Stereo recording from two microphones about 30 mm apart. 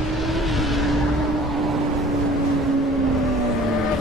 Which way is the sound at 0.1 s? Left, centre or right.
Centre.